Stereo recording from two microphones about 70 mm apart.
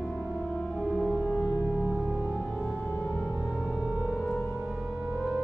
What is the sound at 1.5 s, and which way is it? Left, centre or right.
Music, right.